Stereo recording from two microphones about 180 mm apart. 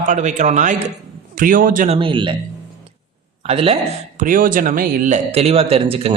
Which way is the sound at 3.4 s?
30° right (ahead or behind).